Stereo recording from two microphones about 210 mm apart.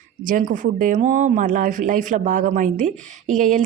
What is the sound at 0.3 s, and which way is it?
Speech, 40° right (ahead or behind).